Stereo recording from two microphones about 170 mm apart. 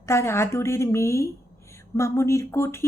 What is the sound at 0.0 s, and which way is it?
Speech, 15° left (ahead or behind).